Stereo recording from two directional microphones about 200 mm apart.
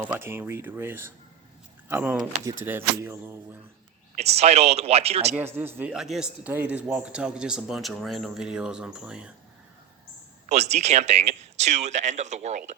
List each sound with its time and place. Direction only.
0.1 s speech: 10° right (ahead or behind)
4.1 s speech: 30° right (ahead or behind)
5.3 s speech: 10° right (ahead or behind)
10.5 s speech: 35° right (ahead or behind)